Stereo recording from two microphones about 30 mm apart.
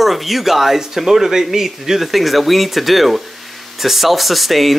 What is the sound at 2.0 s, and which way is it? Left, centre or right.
Speech, centre.